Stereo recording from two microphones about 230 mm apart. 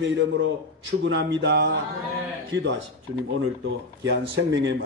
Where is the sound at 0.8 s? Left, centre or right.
Right.